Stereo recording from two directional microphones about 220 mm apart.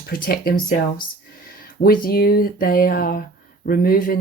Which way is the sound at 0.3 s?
40° left (ahead or behind).